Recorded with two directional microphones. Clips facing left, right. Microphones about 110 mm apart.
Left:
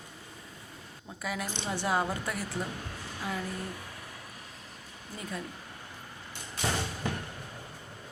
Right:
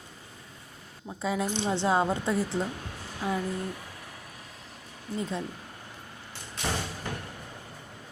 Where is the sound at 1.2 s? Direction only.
25° right (ahead or behind).